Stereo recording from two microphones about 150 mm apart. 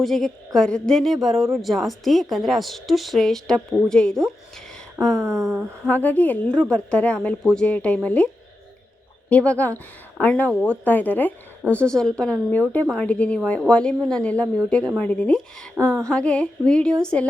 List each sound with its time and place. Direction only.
0.0 s a woman's voice: centre (ahead or behind)
5.2 s a sound: 20° right (ahead or behind)
5.5 s a woman's voice: 5° left (ahead or behind)
9.3 s a woman's voice: 10° left (ahead or behind)